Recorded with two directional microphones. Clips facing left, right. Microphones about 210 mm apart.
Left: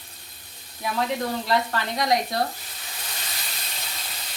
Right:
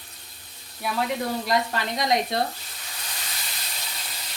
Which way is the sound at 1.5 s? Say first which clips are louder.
Left 1 dB; 20° right (ahead or behind).